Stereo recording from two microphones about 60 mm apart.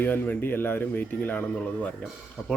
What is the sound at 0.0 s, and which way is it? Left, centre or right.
Speech, left.